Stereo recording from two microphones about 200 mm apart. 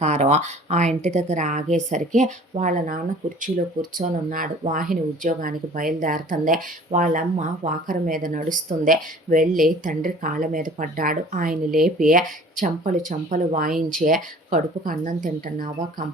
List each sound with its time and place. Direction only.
0.0 s a woman's voice: 35° right (ahead or behind)